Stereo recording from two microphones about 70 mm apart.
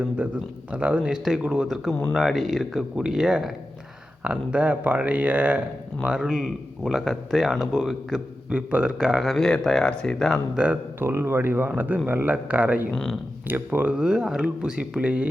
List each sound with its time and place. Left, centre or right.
0.2 s speech: right
1.0 s speech: centre
1.6 s speech: centre
2.9 s speech: centre
4.2 s speech: centre
6.0 s speech: centre
8.4 s speech: centre
10.5 s speech: centre
11.0 s speech: right; by 15.3 s centre